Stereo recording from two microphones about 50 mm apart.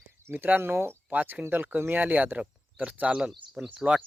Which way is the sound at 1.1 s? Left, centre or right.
Right.